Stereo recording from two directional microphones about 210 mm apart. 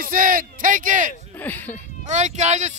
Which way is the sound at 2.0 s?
35° right (ahead or behind).